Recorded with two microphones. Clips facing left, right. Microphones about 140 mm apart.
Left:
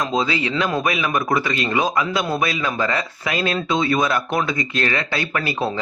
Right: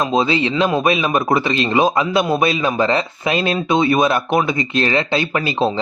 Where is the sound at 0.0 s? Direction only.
25° right (ahead or behind).